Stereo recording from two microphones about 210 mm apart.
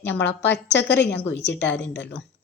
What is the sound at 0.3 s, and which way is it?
A woman's voice, 10° left (ahead or behind).